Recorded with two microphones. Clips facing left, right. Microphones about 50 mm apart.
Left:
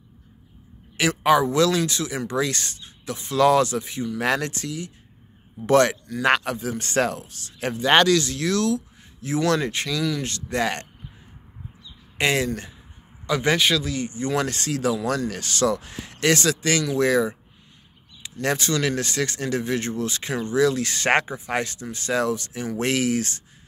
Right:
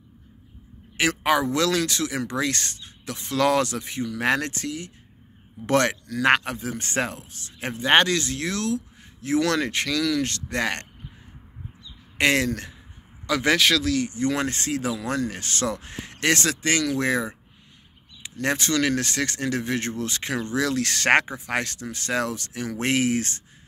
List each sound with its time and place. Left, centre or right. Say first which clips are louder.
0.9 s a man's voice: left 3 dB; right
9.2 s speech: even; right
12.2 s speech: right 1 dB; right
13.3 s speech: even; right
14.3 s a man's voice: left 1 dB; right
18.4 s speech: even; right
22.8 s a man's voice: even; right